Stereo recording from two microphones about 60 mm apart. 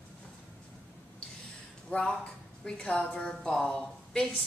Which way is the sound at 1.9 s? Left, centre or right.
Left.